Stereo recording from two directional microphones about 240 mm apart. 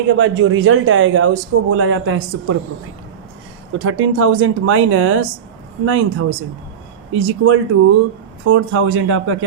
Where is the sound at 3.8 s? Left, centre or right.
Right.